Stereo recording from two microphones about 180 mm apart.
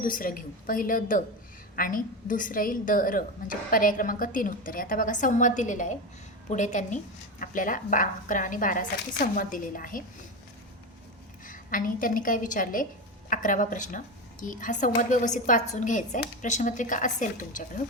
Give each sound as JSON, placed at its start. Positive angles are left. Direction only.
{"t": 0.0, "sound": "a woman's voice", "side_deg": 50}
{"t": 11.4, "sound": "a woman's voice", "side_deg": 50}